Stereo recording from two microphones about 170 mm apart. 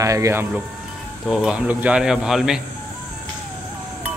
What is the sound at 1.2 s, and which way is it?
Speech, 5° right (ahead or behind).